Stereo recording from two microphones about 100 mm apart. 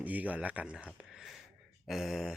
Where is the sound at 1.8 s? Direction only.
5° right (ahead or behind).